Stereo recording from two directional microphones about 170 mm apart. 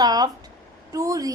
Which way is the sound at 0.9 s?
20° right (ahead or behind).